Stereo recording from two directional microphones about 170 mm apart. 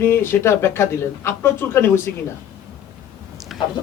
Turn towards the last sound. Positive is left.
turn(degrees=0)  # may be behind; listen again after turning